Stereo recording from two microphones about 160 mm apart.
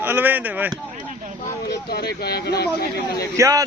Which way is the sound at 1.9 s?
80° left.